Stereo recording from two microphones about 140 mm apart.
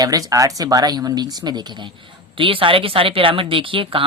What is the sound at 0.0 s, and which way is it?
A woman's voice, 25° right (ahead or behind).